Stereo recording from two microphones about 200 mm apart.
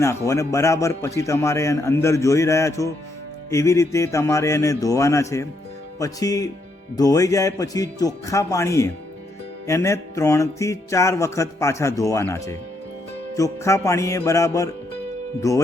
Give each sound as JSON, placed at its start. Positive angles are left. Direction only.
{"t": 0.0, "sound": "a man's voice", "side_deg": 15}